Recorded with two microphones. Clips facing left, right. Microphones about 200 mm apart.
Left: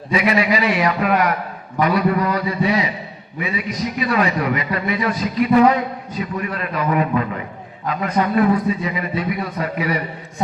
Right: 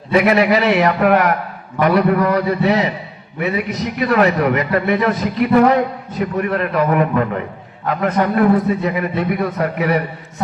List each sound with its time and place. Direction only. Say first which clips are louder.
0.1 s a man's voice: right 5 dB; 55° right (ahead or behind)